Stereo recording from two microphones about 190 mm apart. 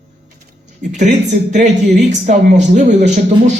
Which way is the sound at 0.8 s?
40° right (ahead or behind).